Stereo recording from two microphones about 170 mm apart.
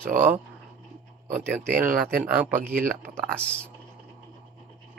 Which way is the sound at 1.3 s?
10° right (ahead or behind).